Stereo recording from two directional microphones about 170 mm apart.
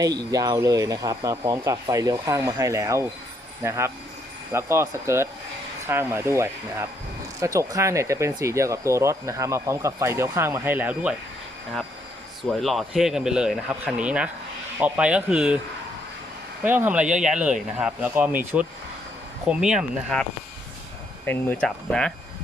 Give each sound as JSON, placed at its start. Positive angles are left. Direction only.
{"t": 0.0, "sound": "speech", "side_deg": -25}
{"t": 12.5, "sound": "speech", "side_deg": 0}
{"t": 16.6, "sound": "speech", "side_deg": -10}
{"t": 21.2, "sound": "speech", "side_deg": 10}